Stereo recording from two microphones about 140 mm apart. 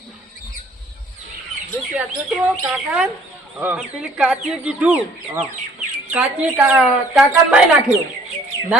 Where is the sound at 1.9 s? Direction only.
10° right (ahead or behind).